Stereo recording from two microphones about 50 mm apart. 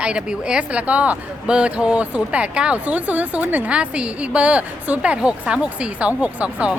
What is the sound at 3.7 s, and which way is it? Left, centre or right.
Speech, right.